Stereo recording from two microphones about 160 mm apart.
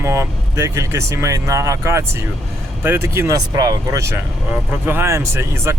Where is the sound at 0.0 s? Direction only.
20° right (ahead or behind).